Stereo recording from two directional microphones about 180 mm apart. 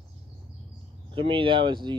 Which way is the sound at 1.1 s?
30° right (ahead or behind).